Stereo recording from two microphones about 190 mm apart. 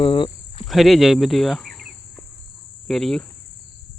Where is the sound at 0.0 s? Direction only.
25° left (ahead or behind).